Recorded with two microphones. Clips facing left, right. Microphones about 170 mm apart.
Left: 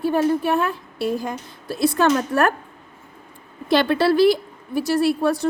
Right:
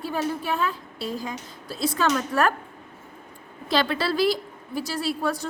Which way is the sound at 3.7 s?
60° left (ahead or behind).